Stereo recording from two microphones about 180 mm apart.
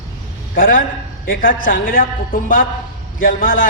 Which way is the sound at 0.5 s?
50° left (ahead or behind).